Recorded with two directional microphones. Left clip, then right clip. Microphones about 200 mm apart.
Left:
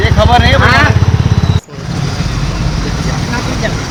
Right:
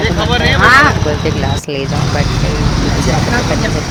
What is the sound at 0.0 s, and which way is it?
Vehicle, 55° left (ahead or behind).